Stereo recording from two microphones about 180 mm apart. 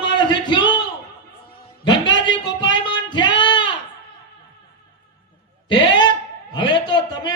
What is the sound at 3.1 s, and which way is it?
Singing, 25° left (ahead or behind).